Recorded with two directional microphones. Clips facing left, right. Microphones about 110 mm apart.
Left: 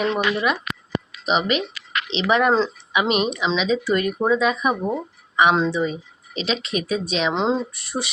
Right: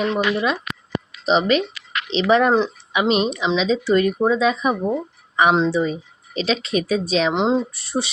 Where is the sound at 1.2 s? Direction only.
35° right (ahead or behind).